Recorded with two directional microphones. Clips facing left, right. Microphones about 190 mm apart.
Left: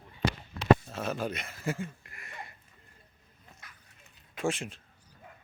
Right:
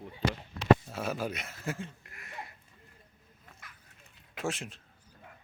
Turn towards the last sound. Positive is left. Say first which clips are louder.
# left 4 dB
turn(degrees=0)  # may be behind; listen again after turning